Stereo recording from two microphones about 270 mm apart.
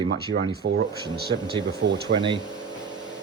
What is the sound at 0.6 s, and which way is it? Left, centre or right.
Speech, right.